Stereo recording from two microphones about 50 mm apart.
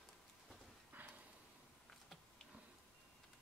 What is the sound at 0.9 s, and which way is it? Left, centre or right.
Horse, right.